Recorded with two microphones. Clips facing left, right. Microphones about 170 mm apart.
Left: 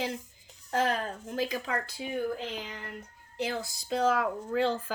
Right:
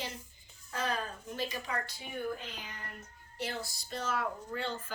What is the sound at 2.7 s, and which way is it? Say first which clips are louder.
Child singing: left 6 dB; 90° left.